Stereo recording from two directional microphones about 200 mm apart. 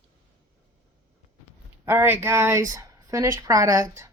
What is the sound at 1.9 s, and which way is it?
Speech, 10° right (ahead or behind).